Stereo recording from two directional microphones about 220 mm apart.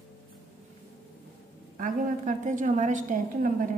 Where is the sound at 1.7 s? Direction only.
35° right (ahead or behind).